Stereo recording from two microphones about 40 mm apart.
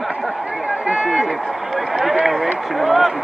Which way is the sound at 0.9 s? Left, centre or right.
Right.